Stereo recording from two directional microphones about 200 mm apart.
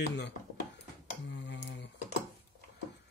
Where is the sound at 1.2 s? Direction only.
60° left (ahead or behind).